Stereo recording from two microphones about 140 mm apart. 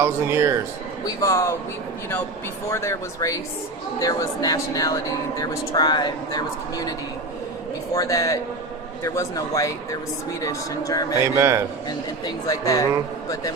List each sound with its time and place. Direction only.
0.0 s a man's voice: 20° right (ahead or behind)
1.0 s speech: 25° left (ahead or behind)
2.7 s speech: 20° left (ahead or behind)
7.9 s speech: 25° left (ahead or behind)
11.2 s a man's voice: 20° right (ahead or behind)
11.9 s speech: 25° left (ahead or behind)